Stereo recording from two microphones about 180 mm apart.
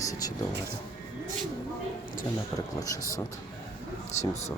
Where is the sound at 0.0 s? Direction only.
20° left (ahead or behind).